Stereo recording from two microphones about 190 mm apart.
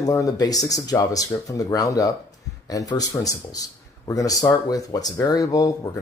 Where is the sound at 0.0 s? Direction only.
20° left (ahead or behind).